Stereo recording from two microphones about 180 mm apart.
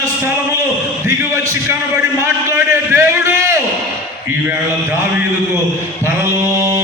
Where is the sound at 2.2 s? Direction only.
15° right (ahead or behind).